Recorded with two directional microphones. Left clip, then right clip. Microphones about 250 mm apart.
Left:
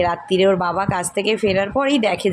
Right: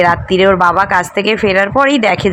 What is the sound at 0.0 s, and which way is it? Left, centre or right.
Speech, centre.